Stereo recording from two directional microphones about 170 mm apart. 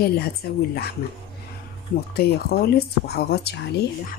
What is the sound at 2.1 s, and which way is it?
Speech, 65° left (ahead or behind).